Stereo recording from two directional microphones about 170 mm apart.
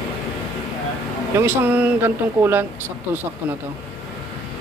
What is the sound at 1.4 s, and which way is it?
Speech, 10° right (ahead or behind).